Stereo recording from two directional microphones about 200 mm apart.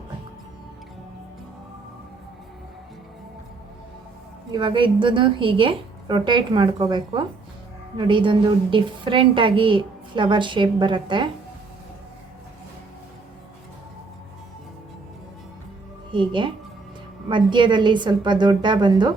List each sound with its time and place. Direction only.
4.5 s a woman's voice: 25° right (ahead or behind)
16.1 s a woman's voice: 25° right (ahead or behind)